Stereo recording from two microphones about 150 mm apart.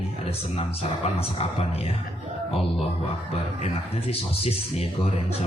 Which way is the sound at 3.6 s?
40° left (ahead or behind).